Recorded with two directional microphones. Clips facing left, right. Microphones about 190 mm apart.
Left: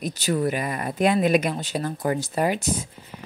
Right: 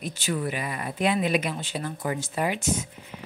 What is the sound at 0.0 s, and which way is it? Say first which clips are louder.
Speech: left 5 dB; 40° left (ahead or behind).